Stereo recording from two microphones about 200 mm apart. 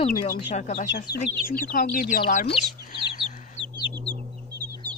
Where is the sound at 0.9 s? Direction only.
50° left (ahead or behind).